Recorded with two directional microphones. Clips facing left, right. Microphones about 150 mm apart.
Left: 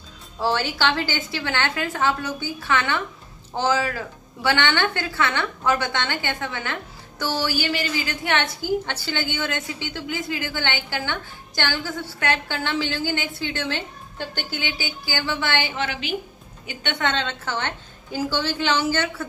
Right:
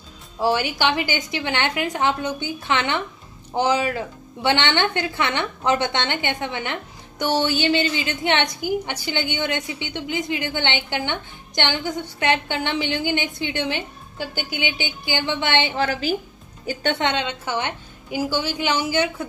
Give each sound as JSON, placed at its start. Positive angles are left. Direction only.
{"t": 0.4, "sound": "a woman's voice", "side_deg": -15}
{"t": 15.7, "sound": "a woman's voice", "side_deg": -40}
{"t": 17.0, "sound": "a woman's voice", "side_deg": -15}